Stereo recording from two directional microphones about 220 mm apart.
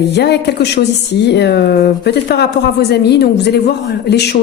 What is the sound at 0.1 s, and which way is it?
Speech, 50° left (ahead or behind).